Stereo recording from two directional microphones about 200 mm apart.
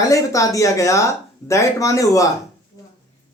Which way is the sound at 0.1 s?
15° left (ahead or behind).